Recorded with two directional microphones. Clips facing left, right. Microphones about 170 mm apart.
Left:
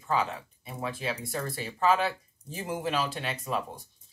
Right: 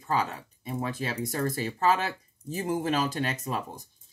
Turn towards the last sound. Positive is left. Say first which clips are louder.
# left 1 dB
turn(degrees=-40)  # may be behind; listen again after turning